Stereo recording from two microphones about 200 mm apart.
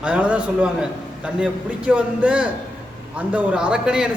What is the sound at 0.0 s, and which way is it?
A man's voice, 5° right (ahead or behind).